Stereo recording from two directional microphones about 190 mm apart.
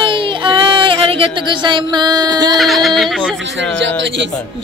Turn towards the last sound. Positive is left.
turn(degrees=-70)  # may be behind; listen again after turning